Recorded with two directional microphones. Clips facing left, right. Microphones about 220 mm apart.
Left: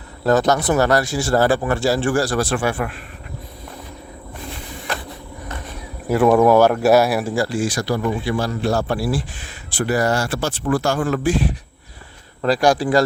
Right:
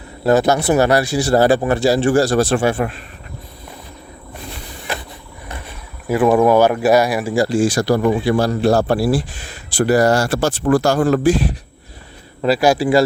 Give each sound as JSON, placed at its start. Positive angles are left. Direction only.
{"t": 0.3, "sound": "speech", "side_deg": -10}
{"t": 6.1, "sound": "speech", "side_deg": 0}
{"t": 7.3, "sound": "speech", "side_deg": -20}
{"t": 7.6, "sound": "a man's voice", "side_deg": -35}
{"t": 12.4, "sound": "speech", "side_deg": -5}